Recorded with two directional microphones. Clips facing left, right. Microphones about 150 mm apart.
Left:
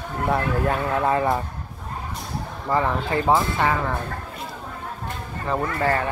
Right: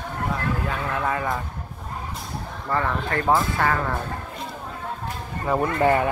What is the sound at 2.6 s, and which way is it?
Speech, 15° left (ahead or behind).